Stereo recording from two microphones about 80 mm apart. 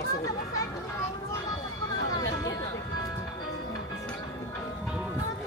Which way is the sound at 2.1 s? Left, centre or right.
Left.